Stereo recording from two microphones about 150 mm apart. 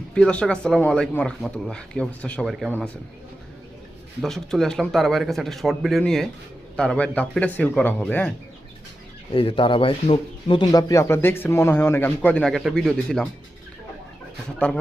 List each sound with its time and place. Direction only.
0.1 s a man's voice: 5° left (ahead or behind)
4.2 s a man's voice: centre (ahead or behind)
9.3 s speech: 35° left (ahead or behind); by 13.2 s 5° left (ahead or behind)